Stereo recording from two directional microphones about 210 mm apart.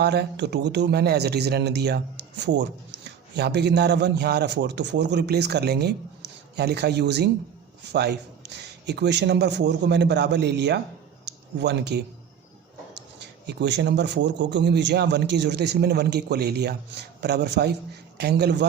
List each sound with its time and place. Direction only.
0.0 s a man's voice: 50° right (ahead or behind)